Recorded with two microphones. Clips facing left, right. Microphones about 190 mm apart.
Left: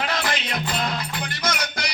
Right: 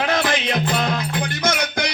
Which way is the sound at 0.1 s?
55° right (ahead or behind).